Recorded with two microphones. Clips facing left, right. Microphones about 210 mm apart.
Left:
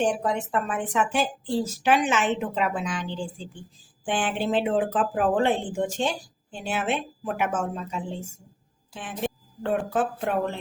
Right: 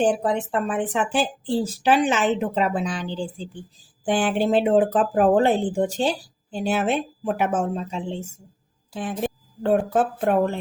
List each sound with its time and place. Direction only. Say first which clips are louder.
0.0 s speech: right 4 dB; 35° right (ahead or behind)
8.9 s a woman's voice: right 4 dB; 40° right (ahead or behind)